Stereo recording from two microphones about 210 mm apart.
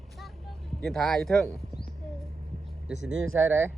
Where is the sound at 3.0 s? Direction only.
65° right (ahead or behind).